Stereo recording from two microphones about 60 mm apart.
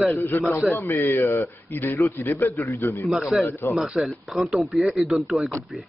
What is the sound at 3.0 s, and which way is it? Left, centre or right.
Speech, centre.